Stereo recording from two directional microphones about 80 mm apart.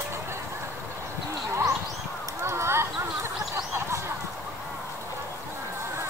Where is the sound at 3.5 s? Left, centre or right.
Right.